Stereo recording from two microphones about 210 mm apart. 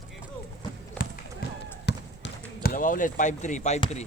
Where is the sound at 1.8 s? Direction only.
50° left (ahead or behind).